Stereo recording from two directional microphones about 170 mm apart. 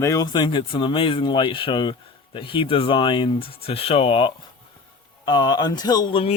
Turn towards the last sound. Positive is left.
turn(degrees=30)  # may be behind; listen again after turning